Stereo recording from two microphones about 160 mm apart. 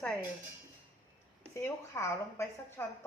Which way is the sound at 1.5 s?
15° left (ahead or behind).